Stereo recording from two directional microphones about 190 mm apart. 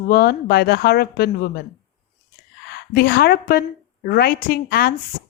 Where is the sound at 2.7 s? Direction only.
55° left (ahead or behind).